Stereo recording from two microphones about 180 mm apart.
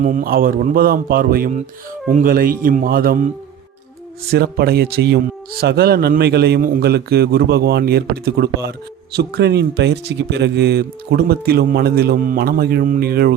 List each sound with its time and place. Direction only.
0.0 s speech: 45° right (ahead or behind)
4.3 s speech: 60° right (ahead or behind)